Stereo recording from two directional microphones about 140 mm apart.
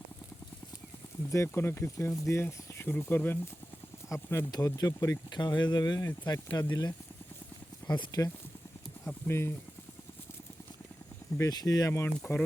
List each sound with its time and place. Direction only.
1.3 s speech: 20° left (ahead or behind)
9.0 s speech: 15° left (ahead or behind)
11.3 s speech: 25° left (ahead or behind)